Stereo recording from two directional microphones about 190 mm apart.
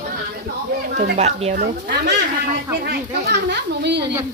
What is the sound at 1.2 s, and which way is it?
Speech, 35° right (ahead or behind).